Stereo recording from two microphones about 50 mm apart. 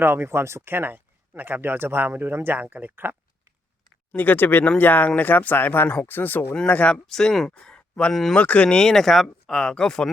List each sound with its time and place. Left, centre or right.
0.0 s speech: right
2.6 s speech: right
2.9 s speech: right
4.1 s speech: left
6.9 s speech: centre
7.6 s a sound: centre
8.1 s speech: centre
8.4 s speech: left